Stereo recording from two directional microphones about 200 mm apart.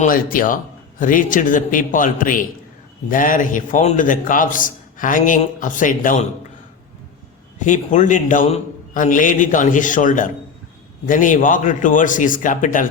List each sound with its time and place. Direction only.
0.0 s a man's voice: 45° left (ahead or behind)
7.6 s a man's voice: 40° left (ahead or behind)